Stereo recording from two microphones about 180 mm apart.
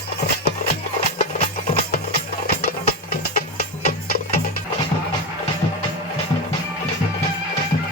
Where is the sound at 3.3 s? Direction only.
50° left (ahead or behind).